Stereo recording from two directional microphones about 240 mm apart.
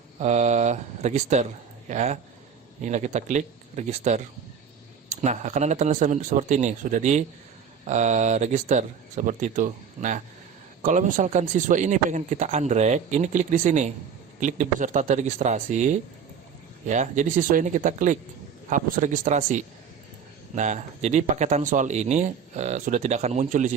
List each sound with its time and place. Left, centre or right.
0.2 s speech: right
5.2 s speech: right